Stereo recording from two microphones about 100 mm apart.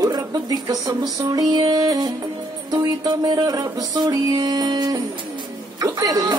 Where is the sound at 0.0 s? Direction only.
40° right (ahead or behind).